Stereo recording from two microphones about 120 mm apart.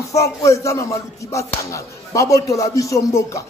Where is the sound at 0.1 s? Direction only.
25° left (ahead or behind).